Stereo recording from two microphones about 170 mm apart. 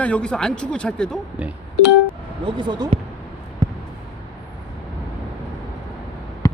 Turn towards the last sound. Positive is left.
turn(degrees=20)  # may be behind; listen again after turning